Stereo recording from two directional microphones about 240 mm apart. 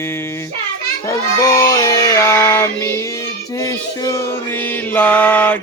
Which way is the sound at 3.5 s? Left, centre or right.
Centre.